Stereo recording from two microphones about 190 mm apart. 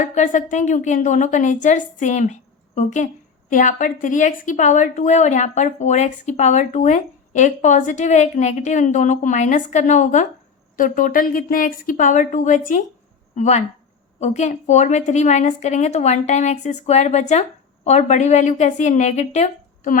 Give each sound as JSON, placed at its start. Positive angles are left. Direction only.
{"t": 0.0, "sound": "a woman's voice", "side_deg": 40}